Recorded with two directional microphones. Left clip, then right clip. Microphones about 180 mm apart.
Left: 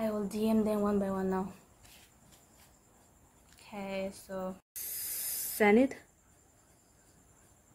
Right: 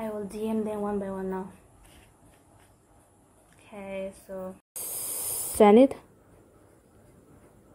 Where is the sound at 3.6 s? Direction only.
15° left (ahead or behind).